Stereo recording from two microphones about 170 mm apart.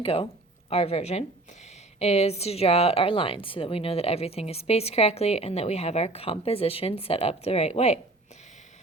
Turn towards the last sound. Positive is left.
turn(degrees=40)  # may be behind; listen again after turning